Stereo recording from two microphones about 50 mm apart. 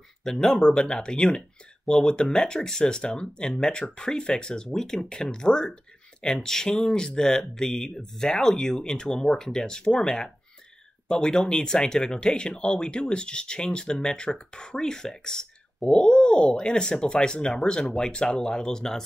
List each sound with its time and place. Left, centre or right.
0.2 s speech: centre